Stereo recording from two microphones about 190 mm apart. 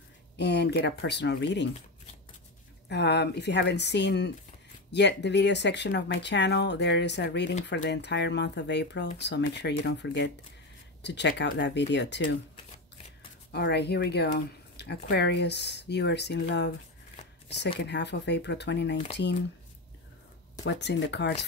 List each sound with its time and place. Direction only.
0.4 s speech: 60° left (ahead or behind)
2.9 s speech: 60° left (ahead or behind)
13.5 s speech: 60° left (ahead or behind)
17.7 s speech: 65° left (ahead or behind)
20.6 s speech: 65° left (ahead or behind)